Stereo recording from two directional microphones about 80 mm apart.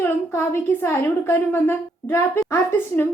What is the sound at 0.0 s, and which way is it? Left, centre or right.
A woman's voice, left.